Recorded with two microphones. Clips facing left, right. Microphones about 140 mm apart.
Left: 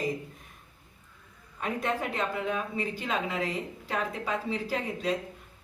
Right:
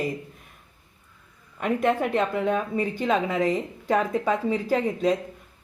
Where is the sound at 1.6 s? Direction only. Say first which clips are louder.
Right 8 dB; 55° right (ahead or behind).